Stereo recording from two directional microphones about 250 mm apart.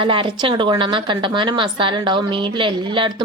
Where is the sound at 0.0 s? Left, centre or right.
Centre.